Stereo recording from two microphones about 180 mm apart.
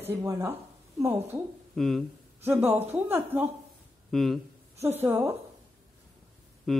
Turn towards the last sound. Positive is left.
turn(degrees=0)  # may be behind; listen again after turning